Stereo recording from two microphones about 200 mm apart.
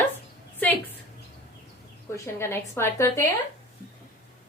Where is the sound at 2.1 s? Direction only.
15° left (ahead or behind).